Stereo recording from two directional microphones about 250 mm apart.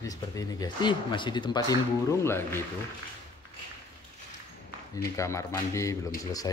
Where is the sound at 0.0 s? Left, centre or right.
Centre.